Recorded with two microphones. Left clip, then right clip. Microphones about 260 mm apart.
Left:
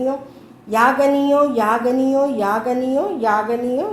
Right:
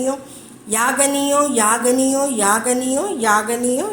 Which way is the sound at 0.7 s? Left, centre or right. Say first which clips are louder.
Left 3 dB; right.